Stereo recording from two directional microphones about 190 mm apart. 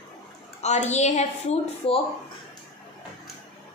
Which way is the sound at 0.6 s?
35° left (ahead or behind).